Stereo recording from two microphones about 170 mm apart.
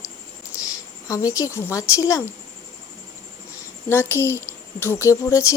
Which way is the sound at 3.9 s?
15° left (ahead or behind).